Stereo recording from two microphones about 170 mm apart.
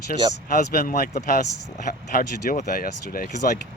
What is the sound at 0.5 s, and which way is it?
Speech, 55° left (ahead or behind).